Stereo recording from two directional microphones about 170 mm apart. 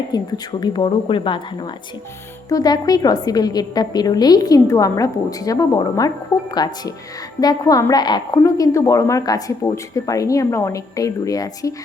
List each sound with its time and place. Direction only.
0.1 s a woman's voice: 25° left (ahead or behind)